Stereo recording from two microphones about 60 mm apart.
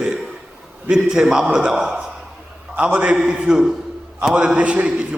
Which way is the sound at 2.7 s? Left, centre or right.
Right.